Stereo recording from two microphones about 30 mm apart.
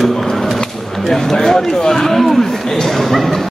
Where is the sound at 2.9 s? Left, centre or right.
Centre.